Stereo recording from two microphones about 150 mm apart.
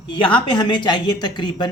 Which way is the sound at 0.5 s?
30° left (ahead or behind).